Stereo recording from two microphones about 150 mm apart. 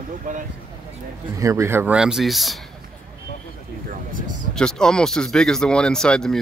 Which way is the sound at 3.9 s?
65° right (ahead or behind).